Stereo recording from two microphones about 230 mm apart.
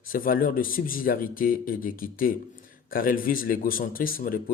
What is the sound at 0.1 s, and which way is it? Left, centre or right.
A man's voice, left.